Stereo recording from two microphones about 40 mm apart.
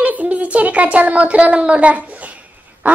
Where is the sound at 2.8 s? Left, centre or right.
Right.